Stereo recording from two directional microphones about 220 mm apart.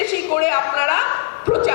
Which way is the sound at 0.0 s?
15° left (ahead or behind).